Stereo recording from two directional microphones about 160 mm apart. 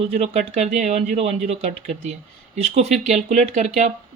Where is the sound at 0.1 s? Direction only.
45° right (ahead or behind).